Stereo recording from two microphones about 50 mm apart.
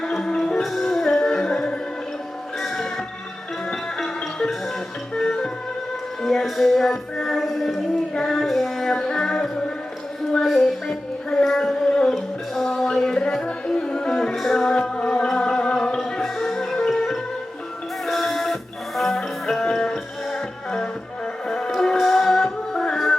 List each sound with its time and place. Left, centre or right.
0.0 s music: centre
2.6 s music: centre
6.2 s music: centre
8.1 s child singing: centre
8.4 s music: centre
10.3 s music: centre
10.8 s music: centre
11.4 s a sound: centre
12.1 s music: centre